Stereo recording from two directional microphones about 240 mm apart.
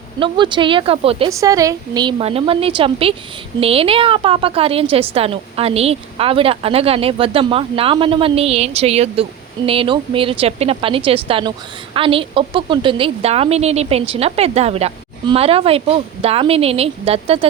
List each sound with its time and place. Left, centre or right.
0.2 s a woman's voice: centre